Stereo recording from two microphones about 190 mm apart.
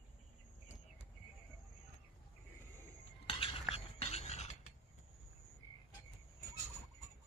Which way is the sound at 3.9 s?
35° left (ahead or behind).